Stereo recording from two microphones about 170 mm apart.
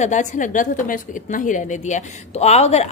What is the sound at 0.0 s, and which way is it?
A woman's voice, 45° left (ahead or behind).